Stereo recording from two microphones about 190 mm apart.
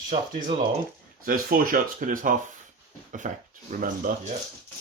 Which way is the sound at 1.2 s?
50° right (ahead or behind).